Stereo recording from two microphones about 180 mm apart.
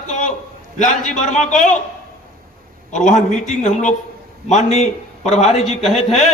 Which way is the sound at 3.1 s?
40° left (ahead or behind).